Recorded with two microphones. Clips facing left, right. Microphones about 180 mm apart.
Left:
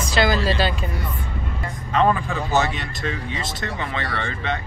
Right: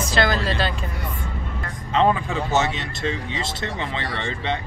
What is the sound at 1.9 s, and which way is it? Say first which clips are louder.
Speech: even; 20° right (ahead or behind).